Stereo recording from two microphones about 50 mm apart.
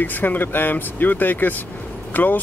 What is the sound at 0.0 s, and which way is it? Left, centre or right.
Speech, left.